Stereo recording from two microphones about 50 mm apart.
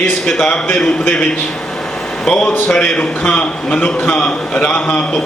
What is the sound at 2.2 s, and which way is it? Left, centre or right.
A man's voice, centre.